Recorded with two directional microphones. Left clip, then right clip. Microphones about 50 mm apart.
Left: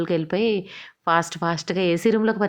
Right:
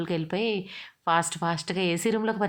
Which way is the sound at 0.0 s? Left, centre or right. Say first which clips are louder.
Left 6 dB; left.